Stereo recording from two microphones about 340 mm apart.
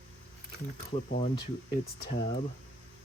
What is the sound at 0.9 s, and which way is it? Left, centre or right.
Speech, centre.